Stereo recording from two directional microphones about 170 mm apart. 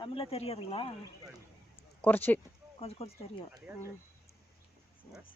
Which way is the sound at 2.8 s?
35° left (ahead or behind).